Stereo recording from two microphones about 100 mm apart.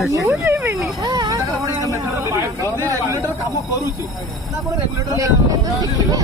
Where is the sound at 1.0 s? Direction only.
45° right (ahead or behind).